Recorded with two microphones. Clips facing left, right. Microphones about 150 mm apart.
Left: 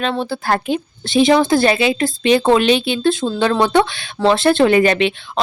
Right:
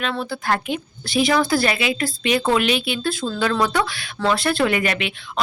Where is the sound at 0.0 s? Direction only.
30° left (ahead or behind).